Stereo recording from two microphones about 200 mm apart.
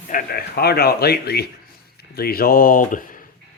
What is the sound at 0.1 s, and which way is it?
Speech, 45° left (ahead or behind).